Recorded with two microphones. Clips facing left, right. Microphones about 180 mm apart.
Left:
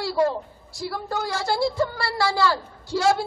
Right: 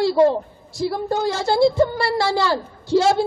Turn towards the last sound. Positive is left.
turn(degrees=-20)  # may be behind; listen again after turning